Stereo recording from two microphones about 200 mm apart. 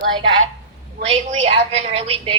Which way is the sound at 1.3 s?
35° right (ahead or behind).